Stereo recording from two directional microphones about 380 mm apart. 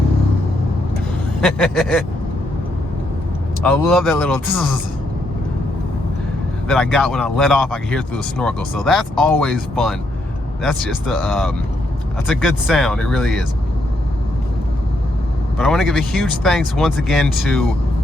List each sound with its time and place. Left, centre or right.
1.4 s speech: centre
3.6 s speech: centre
6.7 s speech: centre
15.5 s speech: centre